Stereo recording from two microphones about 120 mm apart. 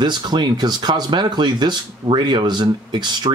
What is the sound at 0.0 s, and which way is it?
Speech, 35° right (ahead or behind).